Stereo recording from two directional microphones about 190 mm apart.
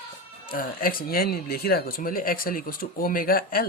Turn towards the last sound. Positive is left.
turn(degrees=50)  # may be behind; listen again after turning